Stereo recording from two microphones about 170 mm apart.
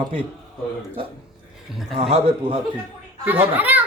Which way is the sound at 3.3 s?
10° right (ahead or behind).